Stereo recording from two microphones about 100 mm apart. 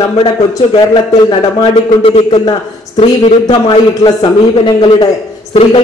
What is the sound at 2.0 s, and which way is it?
Speech, 65° left (ahead or behind).